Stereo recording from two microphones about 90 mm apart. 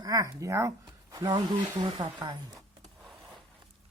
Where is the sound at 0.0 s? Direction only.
40° right (ahead or behind).